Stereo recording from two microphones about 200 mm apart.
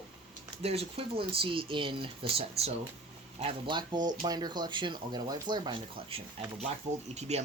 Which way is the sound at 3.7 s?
20° right (ahead or behind).